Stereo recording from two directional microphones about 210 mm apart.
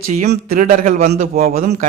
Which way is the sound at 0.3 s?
40° right (ahead or behind).